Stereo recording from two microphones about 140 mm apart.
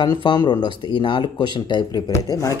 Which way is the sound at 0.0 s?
35° left (ahead or behind).